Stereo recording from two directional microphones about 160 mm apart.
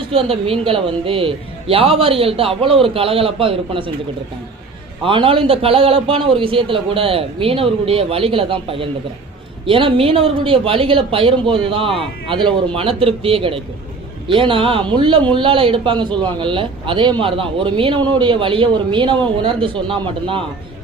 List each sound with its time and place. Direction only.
0.1 s a man's voice: 35° right (ahead or behind)
5.0 s a man's voice: 35° right (ahead or behind)